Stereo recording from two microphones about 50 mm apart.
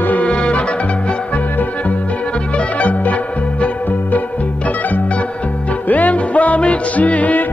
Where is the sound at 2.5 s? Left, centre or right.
Left.